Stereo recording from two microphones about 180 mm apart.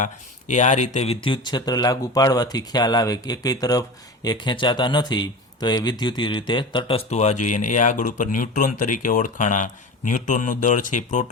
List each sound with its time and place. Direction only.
0.0 s speech: 40° left (ahead or behind)